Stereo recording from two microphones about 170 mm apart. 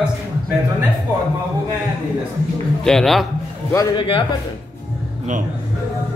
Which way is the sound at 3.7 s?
25° left (ahead or behind).